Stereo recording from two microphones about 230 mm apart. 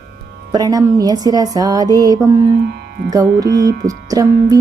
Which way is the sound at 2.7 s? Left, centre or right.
Right.